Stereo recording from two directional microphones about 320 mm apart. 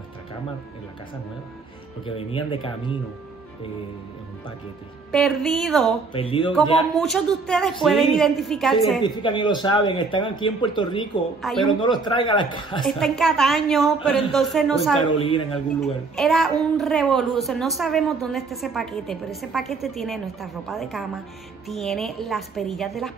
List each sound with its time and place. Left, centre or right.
2.0 s speech: centre
5.1 s a child's voice: centre
6.1 s speech: centre
7.0 s a child's voice: centre
9.0 s speech: centre
12.8 s a child's voice: centre
15.0 s speech: centre
15.8 s a child's voice: centre